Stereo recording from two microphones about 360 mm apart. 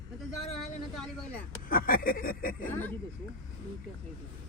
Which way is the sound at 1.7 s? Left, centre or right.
Left.